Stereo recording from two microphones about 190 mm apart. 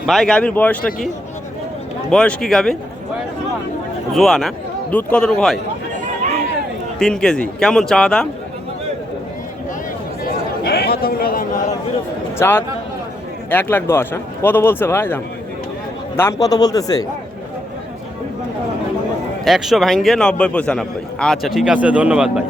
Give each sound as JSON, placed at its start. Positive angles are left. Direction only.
{"t": 0.0, "sound": "a man's voice", "side_deg": 0}
{"t": 2.0, "sound": "a man's voice", "side_deg": 5}
{"t": 4.1, "sound": "a man's voice", "side_deg": 0}
{"t": 7.0, "sound": "a man's voice", "side_deg": 5}
{"t": 10.2, "sound": "chatter", "side_deg": 55}
{"t": 12.4, "sound": "a man's voice", "side_deg": 10}
{"t": 19.5, "sound": "a man's voice", "side_deg": 0}